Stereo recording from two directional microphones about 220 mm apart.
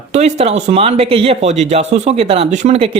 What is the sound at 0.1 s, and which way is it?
Speech, 30° right (ahead or behind).